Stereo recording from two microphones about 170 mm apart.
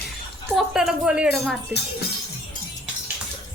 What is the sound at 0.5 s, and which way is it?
Speech, 5° right (ahead or behind).